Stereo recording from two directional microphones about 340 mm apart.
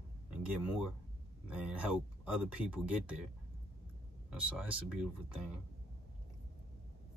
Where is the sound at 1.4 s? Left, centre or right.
Centre.